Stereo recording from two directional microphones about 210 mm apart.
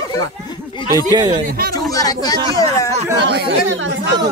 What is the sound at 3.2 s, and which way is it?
Speech, 55° right (ahead or behind).